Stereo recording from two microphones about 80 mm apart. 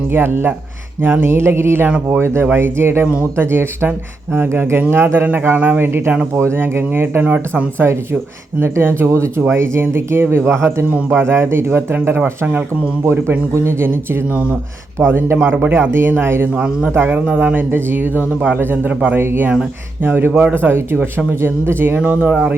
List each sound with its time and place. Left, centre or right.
0.1 s speech: right
8.6 s speech: right
15.5 s speech: centre
15.8 s speech: right
16.6 s speech: centre
21.9 s speech: centre